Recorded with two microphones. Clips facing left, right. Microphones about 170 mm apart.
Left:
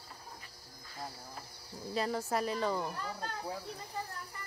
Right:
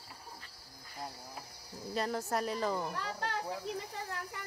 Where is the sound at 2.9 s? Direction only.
85° right.